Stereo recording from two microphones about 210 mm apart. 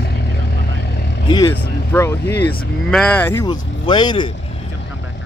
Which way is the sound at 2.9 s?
5° left (ahead or behind).